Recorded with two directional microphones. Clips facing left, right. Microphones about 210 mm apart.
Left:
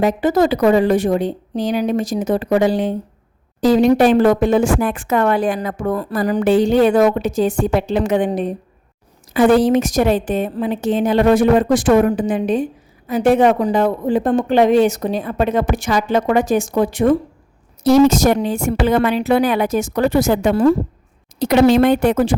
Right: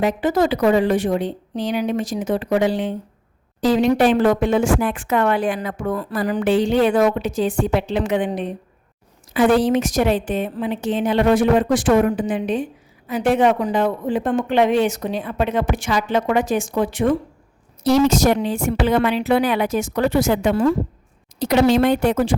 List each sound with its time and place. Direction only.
0.0 s speech: 40° left (ahead or behind)
21.3 s speech: 55° left (ahead or behind)